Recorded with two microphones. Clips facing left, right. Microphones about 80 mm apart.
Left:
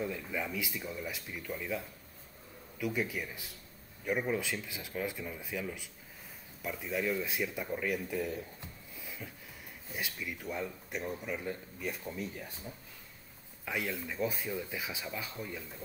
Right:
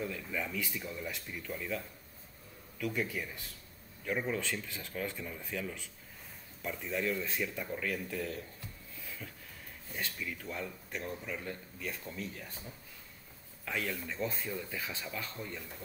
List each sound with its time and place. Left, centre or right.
0.0 s speech: centre
2.8 s speech: centre